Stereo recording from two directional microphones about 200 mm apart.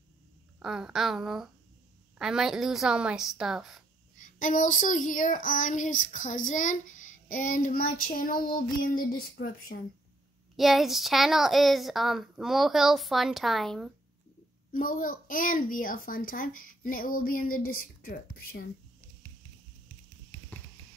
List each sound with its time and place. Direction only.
0.6 s a woman's voice: centre (ahead or behind)
4.2 s child singing: 40° left (ahead or behind)
10.5 s a woman's voice: centre (ahead or behind)
14.7 s child singing: 45° left (ahead or behind)